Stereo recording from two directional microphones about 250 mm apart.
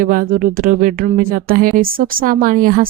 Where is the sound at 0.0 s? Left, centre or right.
Right.